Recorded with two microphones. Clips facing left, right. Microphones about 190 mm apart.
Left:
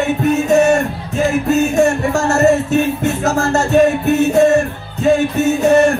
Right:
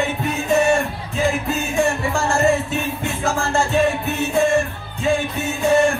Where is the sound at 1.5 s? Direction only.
45° left (ahead or behind).